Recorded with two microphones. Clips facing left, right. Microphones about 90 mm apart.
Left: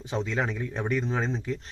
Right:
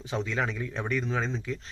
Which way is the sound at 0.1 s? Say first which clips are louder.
Left 1 dB; 30° left (ahead or behind).